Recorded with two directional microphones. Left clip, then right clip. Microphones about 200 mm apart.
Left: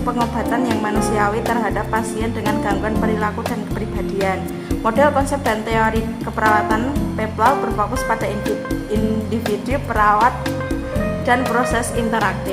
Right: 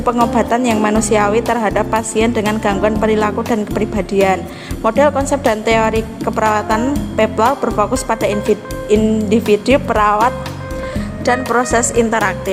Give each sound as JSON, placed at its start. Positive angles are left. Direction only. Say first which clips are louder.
{"t": 0.3, "sound": "a woman's voice", "louder": "right 5 dB", "side_deg": -40}